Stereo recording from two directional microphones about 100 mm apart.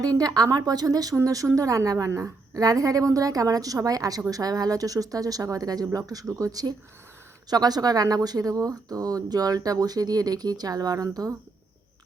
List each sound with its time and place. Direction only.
0.0 s speech: 40° right (ahead or behind)